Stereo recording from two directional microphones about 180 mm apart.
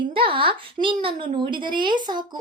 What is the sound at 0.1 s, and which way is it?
A woman's voice, 30° right (ahead or behind).